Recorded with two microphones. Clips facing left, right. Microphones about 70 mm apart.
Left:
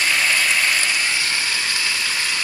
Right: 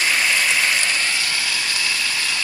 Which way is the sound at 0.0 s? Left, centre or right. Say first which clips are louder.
Even; centre.